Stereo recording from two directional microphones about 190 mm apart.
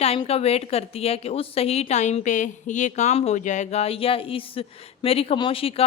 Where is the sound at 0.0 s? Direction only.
30° left (ahead or behind).